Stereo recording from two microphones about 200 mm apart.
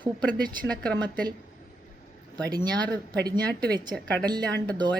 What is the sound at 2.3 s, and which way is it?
Speech, 20° right (ahead or behind).